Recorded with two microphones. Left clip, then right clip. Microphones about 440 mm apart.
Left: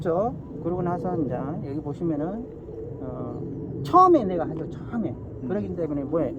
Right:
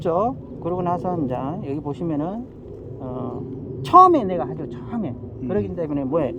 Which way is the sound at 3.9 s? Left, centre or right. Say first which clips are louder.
Right 5 dB; right.